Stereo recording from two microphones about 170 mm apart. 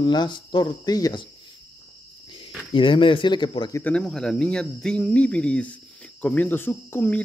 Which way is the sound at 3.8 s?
5° left (ahead or behind).